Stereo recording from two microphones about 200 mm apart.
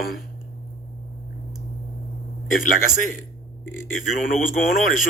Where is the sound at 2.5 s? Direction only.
40° left (ahead or behind).